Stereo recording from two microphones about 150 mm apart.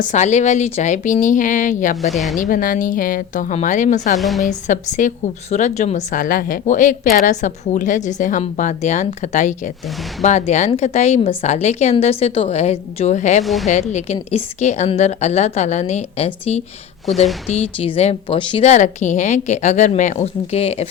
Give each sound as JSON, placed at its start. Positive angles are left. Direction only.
{"t": 0.0, "sound": "a woman's voice", "side_deg": 50}
{"t": 2.0, "sound": "speech", "side_deg": 0}
{"t": 2.5, "sound": "a woman's voice", "side_deg": 65}
{"t": 4.2, "sound": "speech", "side_deg": 0}
{"t": 4.4, "sound": "a woman's voice", "side_deg": 55}
{"t": 13.4, "sound": "speech", "side_deg": 0}
{"t": 13.9, "sound": "a woman's voice", "side_deg": 45}
{"t": 18.6, "sound": "a woman's voice", "side_deg": 50}